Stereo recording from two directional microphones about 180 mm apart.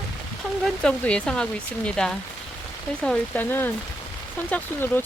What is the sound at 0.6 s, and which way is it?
Speech, 5° left (ahead or behind).